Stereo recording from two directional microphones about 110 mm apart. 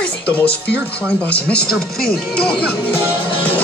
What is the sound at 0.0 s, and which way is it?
Music, 10° left (ahead or behind).